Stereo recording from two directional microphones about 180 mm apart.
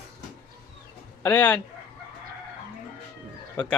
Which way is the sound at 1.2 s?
10° left (ahead or behind).